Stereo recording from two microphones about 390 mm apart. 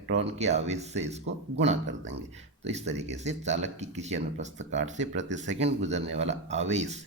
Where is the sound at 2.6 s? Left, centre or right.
Centre.